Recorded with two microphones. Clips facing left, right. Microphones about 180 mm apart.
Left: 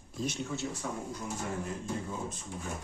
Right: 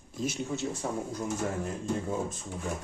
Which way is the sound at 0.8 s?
35° right (ahead or behind).